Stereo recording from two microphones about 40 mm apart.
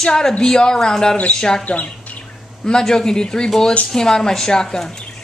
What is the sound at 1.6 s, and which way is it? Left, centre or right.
Bird, left.